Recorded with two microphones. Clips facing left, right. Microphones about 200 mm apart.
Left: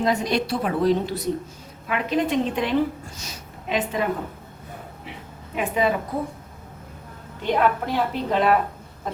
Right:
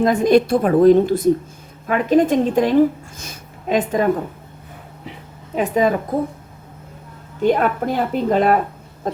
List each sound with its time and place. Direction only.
0.0 s a woman's voice: 50° right (ahead or behind)
5.5 s a woman's voice: 40° right (ahead or behind)
7.4 s a woman's voice: 45° right (ahead or behind)